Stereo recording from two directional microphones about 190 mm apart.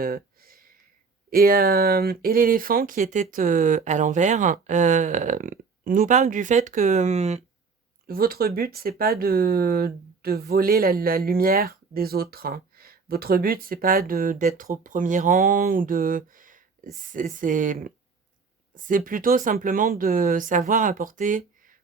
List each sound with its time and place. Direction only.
0.0 s a sound: 50° right (ahead or behind)
1.3 s speech: 50° right (ahead or behind); by 7.4 s 35° right (ahead or behind)
8.0 s speech: 50° right (ahead or behind)